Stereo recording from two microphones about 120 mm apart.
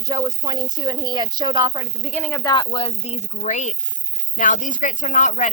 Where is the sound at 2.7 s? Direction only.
60° left (ahead or behind).